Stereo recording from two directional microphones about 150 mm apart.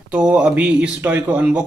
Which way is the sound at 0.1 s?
5° right (ahead or behind).